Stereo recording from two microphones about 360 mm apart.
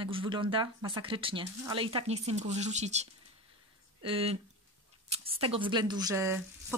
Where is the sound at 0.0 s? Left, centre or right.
Centre.